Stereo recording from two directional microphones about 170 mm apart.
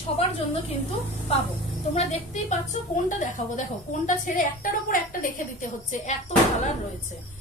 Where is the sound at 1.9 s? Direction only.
40° left (ahead or behind).